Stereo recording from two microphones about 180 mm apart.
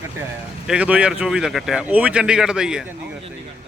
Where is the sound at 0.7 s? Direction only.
5° right (ahead or behind).